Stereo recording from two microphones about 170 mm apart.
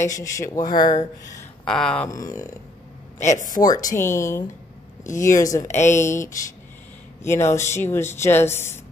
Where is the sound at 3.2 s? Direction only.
45° left (ahead or behind).